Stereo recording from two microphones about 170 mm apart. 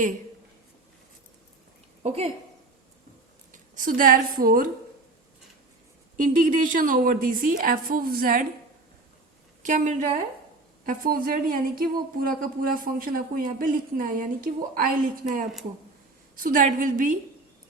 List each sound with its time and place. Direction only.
2.0 s speech: 35° right (ahead or behind)
3.5 s a woman's voice: 55° right (ahead or behind)
6.1 s speech: 50° right (ahead or behind)
9.6 s a woman's voice: 45° right (ahead or behind)